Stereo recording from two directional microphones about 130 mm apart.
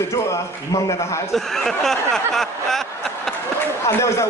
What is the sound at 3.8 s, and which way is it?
Speech, 25° left (ahead or behind).